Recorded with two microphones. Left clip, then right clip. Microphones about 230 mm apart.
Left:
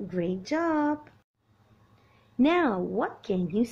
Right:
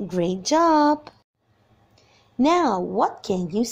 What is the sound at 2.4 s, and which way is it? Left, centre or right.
A woman's voice, centre.